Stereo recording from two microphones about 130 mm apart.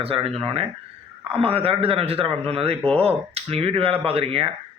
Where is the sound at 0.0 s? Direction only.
50° right (ahead or behind).